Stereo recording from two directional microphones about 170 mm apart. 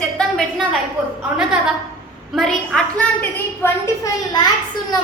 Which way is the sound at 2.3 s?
Centre (ahead or behind).